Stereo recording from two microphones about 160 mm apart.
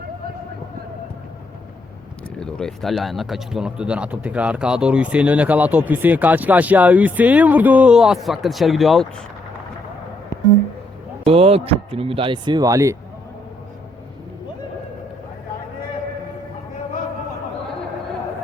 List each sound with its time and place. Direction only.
2.4 s speech: 5° left (ahead or behind)
11.3 s speech: 40° right (ahead or behind); by 13.0 s 20° right (ahead or behind)